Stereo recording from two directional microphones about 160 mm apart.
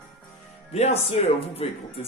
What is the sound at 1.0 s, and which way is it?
Speech, 40° left (ahead or behind).